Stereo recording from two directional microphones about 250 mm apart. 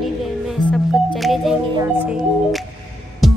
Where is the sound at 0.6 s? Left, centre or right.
Centre.